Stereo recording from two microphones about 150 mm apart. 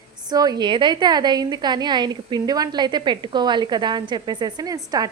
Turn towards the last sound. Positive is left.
turn(degrees=-25)  # may be behind; listen again after turning